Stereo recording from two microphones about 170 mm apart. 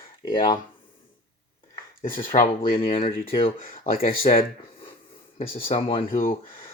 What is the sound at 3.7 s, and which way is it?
Speech, 60° left (ahead or behind).